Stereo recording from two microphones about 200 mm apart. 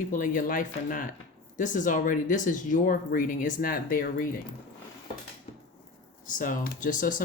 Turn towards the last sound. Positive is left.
turn(degrees=40)  # may be behind; listen again after turning